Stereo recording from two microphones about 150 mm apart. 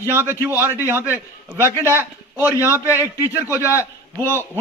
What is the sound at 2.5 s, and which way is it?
Speech, 20° left (ahead or behind).